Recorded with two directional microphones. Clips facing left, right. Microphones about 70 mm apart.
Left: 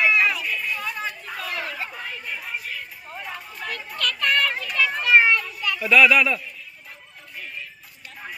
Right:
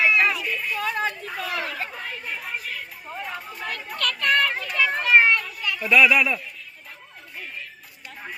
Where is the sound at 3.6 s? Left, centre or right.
Right.